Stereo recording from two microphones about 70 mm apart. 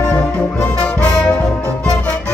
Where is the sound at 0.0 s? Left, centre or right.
Centre.